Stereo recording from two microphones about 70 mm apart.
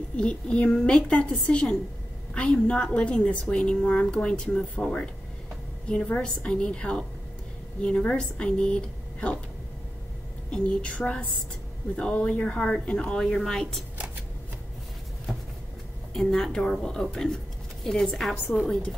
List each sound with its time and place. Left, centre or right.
0.2 s a woman's voice: centre
10.5 s a woman's voice: centre
16.1 s a woman's voice: centre